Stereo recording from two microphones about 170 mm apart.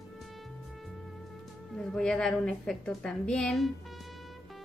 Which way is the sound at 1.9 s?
5° left (ahead or behind).